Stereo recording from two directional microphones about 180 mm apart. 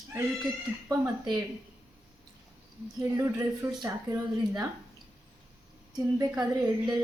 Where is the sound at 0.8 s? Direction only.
15° right (ahead or behind).